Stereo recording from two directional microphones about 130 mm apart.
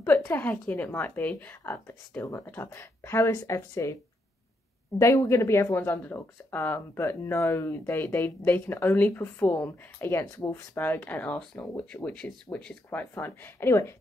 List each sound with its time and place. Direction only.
0.2 s speech: 15° left (ahead or behind)
4.9 s speech: 20° left (ahead or behind)